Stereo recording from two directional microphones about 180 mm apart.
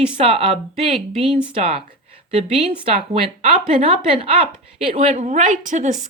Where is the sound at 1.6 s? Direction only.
35° right (ahead or behind).